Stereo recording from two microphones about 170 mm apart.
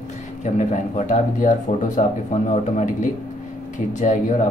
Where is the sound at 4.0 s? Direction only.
50° left (ahead or behind).